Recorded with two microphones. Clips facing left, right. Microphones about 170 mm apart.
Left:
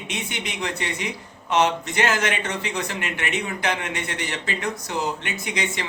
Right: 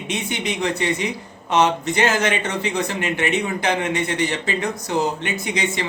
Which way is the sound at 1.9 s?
25° right (ahead or behind).